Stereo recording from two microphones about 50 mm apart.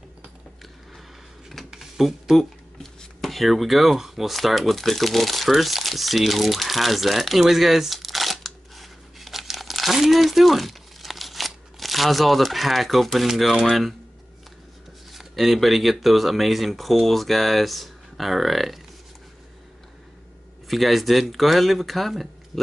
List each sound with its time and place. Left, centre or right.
1.7 s cash register: centre
2.8 s speech: centre
15.1 s speech: centre
20.6 s speech: centre